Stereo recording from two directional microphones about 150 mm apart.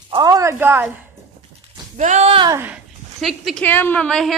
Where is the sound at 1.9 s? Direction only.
50° right (ahead or behind).